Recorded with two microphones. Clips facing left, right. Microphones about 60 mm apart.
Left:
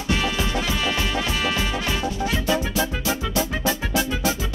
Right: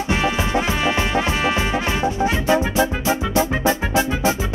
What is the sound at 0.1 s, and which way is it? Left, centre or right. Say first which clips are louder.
Music: right 3 dB; right.